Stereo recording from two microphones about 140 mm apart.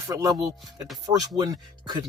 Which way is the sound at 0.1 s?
25° right (ahead or behind).